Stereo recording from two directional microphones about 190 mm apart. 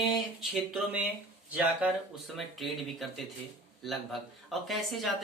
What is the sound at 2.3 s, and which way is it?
Speech, centre (ahead or behind).